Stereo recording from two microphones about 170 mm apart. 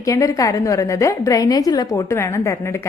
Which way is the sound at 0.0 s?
20° left (ahead or behind).